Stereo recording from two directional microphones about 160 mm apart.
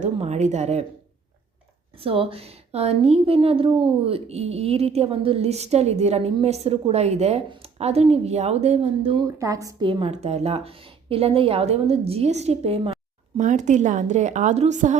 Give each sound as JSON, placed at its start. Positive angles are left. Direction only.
{"t": 0.0, "sound": "a woman's voice", "side_deg": -45}
{"t": 2.0, "sound": "a woman's voice", "side_deg": -35}
{"t": 9.2, "sound": "a woman's voice", "side_deg": -20}
{"t": 9.8, "sound": "a woman's voice", "side_deg": -35}
{"t": 13.4, "sound": "a woman's voice", "side_deg": -50}